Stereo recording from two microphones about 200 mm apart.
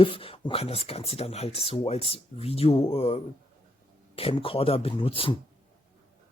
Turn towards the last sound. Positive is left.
turn(degrees=25)  # may be behind; listen again after turning